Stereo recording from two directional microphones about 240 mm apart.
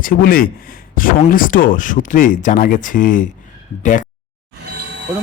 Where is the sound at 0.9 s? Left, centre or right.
Left.